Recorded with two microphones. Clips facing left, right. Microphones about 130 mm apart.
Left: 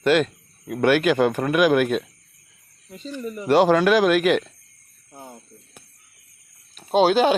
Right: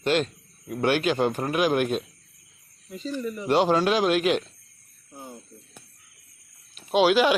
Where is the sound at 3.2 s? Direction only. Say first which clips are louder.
Left 5 dB; 45° left (ahead or behind).